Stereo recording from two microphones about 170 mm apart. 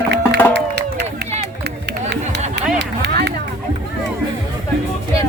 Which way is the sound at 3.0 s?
80° right.